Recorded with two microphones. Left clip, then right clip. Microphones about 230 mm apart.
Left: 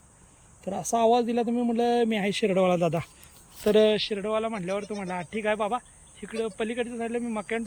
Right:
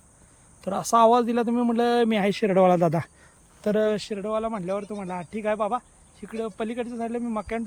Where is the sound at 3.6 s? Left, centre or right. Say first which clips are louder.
Left 3 dB; right.